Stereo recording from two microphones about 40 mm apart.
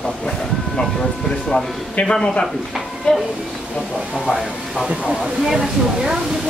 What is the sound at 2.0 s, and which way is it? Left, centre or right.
Speech, centre.